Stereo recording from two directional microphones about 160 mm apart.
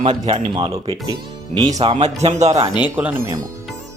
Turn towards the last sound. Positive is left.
turn(degrees=-10)  # may be behind; listen again after turning